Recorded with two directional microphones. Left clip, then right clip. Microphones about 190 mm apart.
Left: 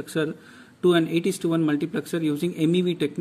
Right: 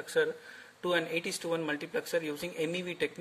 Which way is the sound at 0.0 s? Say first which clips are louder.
Left 2 dB; 40° left (ahead or behind).